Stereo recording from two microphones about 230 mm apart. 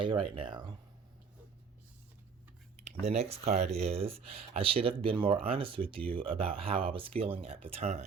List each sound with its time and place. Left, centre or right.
0.0 s speech: right
2.8 s speech: right